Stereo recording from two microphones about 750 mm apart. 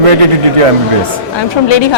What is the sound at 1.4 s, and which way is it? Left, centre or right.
Speech, left.